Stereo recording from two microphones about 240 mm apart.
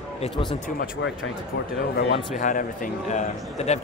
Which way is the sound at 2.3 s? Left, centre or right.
Left.